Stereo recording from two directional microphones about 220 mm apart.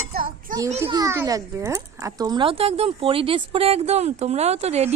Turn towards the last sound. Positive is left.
turn(degrees=-30)  # may be behind; listen again after turning